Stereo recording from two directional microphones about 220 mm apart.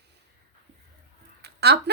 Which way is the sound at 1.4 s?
45° right (ahead or behind).